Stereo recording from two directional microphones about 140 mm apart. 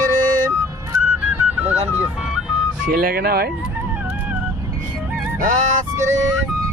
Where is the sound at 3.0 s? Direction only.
90° right.